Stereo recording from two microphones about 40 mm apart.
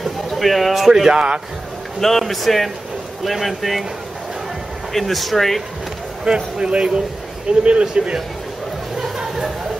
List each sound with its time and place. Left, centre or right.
0.0 s speech: centre
2.0 s a man's voice: centre
4.9 s a man's voice: centre
6.2 s speech: right